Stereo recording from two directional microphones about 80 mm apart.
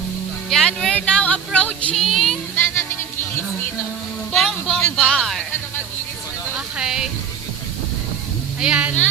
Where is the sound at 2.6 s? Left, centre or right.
Left.